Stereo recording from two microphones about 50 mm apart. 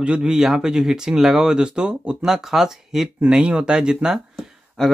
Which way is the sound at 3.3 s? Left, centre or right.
Right.